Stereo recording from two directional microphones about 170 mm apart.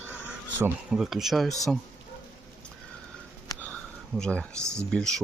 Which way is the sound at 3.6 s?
5° left (ahead or behind).